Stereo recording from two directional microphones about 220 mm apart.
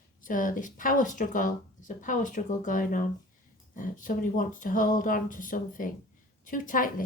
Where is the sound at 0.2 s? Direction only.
35° left (ahead or behind).